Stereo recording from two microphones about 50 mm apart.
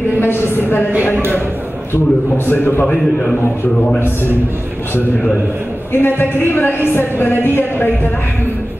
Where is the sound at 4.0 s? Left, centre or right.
Left.